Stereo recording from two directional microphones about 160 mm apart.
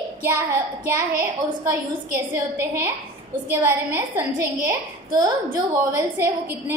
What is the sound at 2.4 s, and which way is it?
A woman's voice, 15° right (ahead or behind).